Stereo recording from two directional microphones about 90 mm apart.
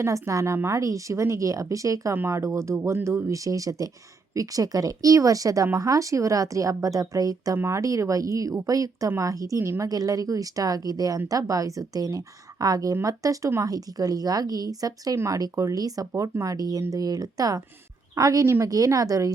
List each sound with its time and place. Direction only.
0.0 s a woman's voice: 35° right (ahead or behind)